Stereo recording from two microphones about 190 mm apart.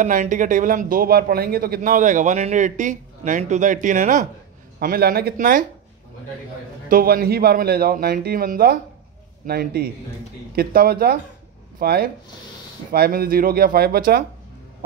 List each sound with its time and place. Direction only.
0.0 s a man's voice: 45° right (ahead or behind)
4.7 s a man's voice: 55° right (ahead or behind)
6.9 s a man's voice: 50° right (ahead or behind)